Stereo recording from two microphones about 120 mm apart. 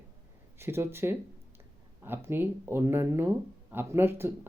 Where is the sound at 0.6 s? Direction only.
20° right (ahead or behind).